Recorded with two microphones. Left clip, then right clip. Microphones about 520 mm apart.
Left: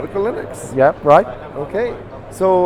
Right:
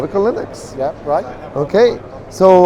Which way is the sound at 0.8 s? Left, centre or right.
Left.